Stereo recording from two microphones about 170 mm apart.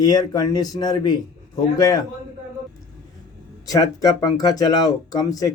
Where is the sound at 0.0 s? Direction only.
25° left (ahead or behind).